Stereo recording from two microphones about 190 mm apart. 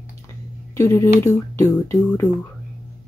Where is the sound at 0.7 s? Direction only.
15° left (ahead or behind).